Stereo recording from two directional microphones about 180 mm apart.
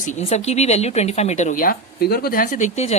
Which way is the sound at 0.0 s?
40° left (ahead or behind).